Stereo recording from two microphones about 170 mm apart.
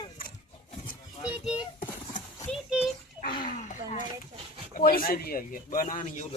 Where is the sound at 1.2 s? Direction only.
5° right (ahead or behind).